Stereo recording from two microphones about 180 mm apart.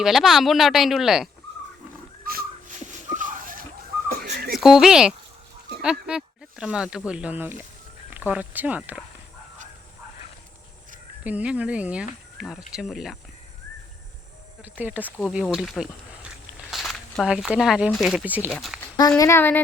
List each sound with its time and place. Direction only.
0.0 s a woman's voice: centre (ahead or behind)
2.2 s a sound: 55° right (ahead or behind)
4.2 s whistling: 60° right (ahead or behind)
4.5 s speech: centre (ahead or behind)
11.2 s a woman's voice: 10° right (ahead or behind)
14.6 s a woman's voice: 10° right (ahead or behind)
18.5 s a woman's voice: centre (ahead or behind)
18.9 s speech: 20° left (ahead or behind)